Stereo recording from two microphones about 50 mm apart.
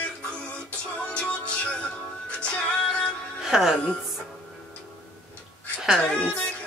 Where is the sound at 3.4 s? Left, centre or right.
Centre.